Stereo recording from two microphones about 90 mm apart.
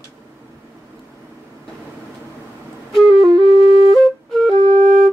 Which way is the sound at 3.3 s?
85° left.